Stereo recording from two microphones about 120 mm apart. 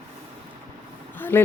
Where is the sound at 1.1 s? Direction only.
15° left (ahead or behind).